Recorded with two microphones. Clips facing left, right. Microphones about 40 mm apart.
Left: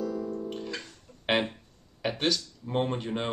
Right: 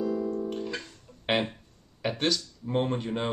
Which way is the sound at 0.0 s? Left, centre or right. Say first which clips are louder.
Right 3 dB; right.